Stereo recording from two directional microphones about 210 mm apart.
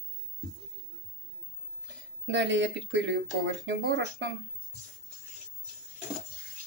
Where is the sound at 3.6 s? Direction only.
55° right (ahead or behind).